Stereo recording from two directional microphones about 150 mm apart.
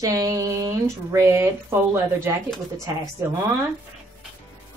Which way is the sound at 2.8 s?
20° right (ahead or behind).